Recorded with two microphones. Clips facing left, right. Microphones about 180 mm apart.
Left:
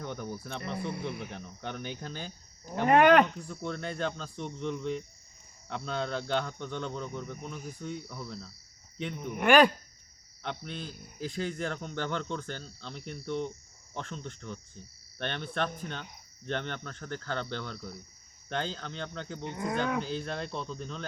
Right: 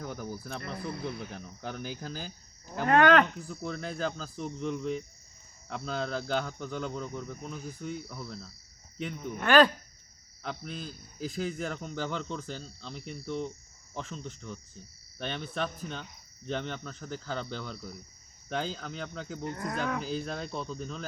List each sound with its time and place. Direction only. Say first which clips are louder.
0.0 s a man's voice: even; 5° right (ahead or behind)
2.9 s speech: left 1 dB; 15° left (ahead or behind)
3.4 s a man's voice: even; 5° right (ahead or behind)
9.3 s speech: even; 15° left (ahead or behind)
10.4 s a man's voice: even; centre (ahead or behind)